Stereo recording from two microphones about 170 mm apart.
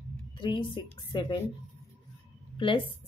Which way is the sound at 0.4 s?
30° left (ahead or behind).